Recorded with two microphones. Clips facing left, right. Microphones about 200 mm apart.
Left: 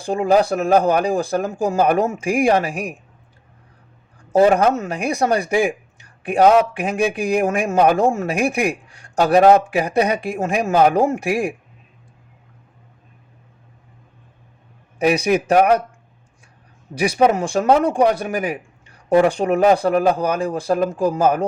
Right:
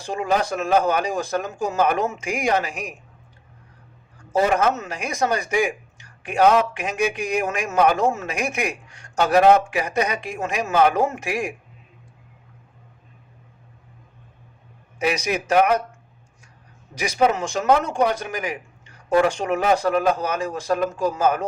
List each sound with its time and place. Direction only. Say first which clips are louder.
0.0 s speech: left 7 dB; 35° left (ahead or behind)
4.3 s speech: left 5 dB; 35° left (ahead or behind)
14.9 s a man's voice: left 7 dB; 35° left (ahead or behind)
17.0 s speech: left 4 dB; 35° left (ahead or behind)